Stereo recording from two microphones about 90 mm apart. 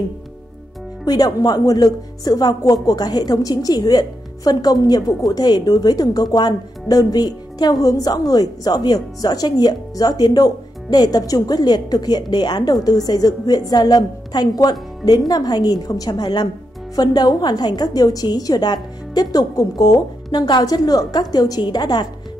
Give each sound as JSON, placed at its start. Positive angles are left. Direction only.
{"t": 1.0, "sound": "a woman's voice", "side_deg": 45}